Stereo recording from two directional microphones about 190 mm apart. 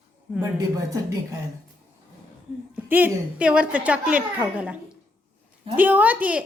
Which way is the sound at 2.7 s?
10° right (ahead or behind).